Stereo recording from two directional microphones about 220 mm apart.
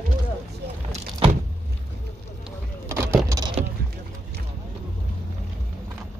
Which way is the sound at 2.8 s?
10° right (ahead or behind).